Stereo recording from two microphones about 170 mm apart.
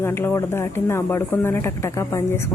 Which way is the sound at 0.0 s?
15° left (ahead or behind).